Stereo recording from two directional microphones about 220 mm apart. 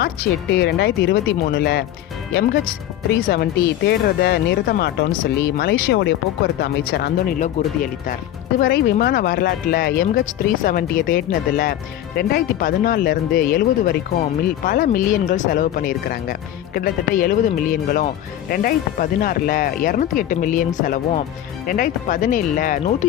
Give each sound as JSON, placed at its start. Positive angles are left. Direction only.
{"t": 0.5, "sound": "speech", "side_deg": 50}
{"t": 3.1, "sound": "speech", "side_deg": 40}